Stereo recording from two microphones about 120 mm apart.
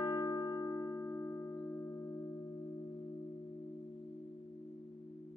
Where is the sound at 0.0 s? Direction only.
30° left (ahead or behind).